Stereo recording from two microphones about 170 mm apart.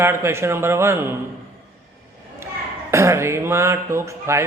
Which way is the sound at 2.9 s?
15° right (ahead or behind).